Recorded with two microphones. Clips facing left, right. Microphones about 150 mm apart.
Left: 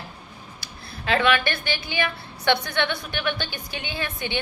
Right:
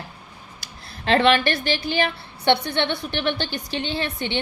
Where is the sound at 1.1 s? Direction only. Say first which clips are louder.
Right 4 dB; 35° right (ahead or behind).